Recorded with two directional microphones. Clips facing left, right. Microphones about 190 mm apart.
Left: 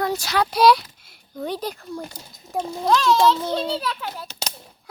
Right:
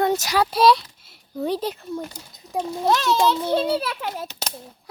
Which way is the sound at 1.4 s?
30° right (ahead or behind).